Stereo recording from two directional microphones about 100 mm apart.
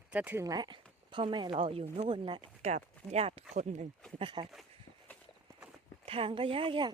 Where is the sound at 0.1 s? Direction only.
15° right (ahead or behind).